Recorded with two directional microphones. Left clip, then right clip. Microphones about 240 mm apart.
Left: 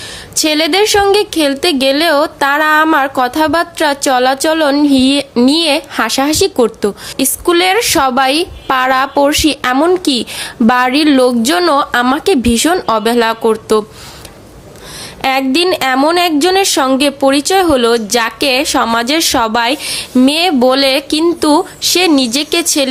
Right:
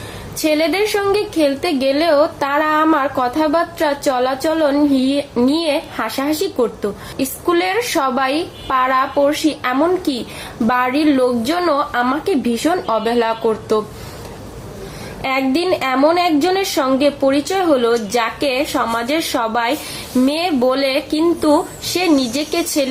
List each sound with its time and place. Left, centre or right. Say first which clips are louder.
0.3 s a woman's voice: left 5 dB; left
15.2 s a woman's voice: left 6 dB; left